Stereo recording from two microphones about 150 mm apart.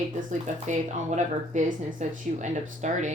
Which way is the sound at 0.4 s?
55° right (ahead or behind).